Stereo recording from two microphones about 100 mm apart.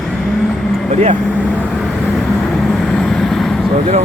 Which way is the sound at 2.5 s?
5° left (ahead or behind).